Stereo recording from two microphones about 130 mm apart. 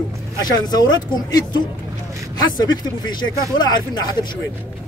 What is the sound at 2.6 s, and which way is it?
Speech, 35° left (ahead or behind).